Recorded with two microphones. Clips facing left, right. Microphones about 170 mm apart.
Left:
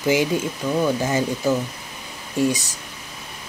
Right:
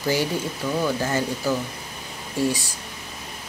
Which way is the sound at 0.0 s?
15° left (ahead or behind).